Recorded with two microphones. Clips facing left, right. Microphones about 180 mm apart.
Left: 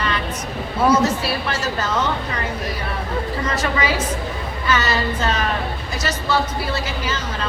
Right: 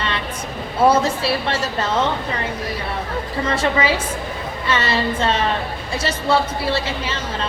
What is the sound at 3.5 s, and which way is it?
A woman's voice, 30° right (ahead or behind).